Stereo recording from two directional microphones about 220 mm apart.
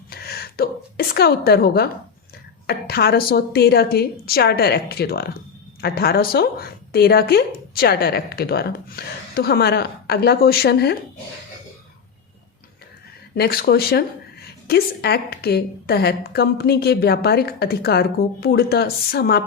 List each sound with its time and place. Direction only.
0.1 s a woman's voice: 45° left (ahead or behind)
13.3 s a woman's voice: 45° left (ahead or behind)